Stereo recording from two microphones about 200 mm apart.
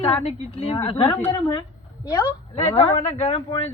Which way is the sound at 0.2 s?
30° left (ahead or behind).